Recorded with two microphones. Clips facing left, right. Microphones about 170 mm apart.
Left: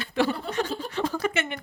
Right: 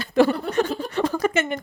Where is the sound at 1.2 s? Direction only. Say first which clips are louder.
Right 5 dB; 40° right (ahead or behind).